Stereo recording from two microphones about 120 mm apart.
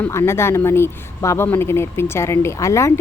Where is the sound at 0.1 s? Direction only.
20° left (ahead or behind).